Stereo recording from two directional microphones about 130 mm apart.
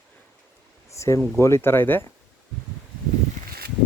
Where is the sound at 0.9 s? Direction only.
25° left (ahead or behind).